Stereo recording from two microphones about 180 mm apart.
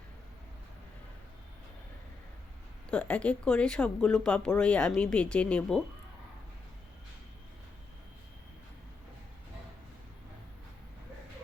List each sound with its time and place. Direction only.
2.9 s speech: 5° left (ahead or behind)